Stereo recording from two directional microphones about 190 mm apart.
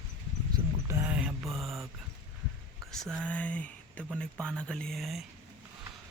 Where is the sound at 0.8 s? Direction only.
15° right (ahead or behind).